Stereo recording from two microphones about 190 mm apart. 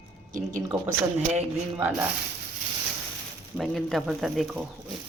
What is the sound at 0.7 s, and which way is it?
Speech, 5° right (ahead or behind).